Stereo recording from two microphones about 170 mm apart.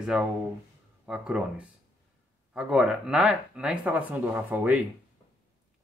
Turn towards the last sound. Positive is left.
turn(degrees=-10)  # may be behind; listen again after turning